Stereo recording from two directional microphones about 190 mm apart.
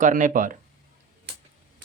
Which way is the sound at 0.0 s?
45° right (ahead or behind).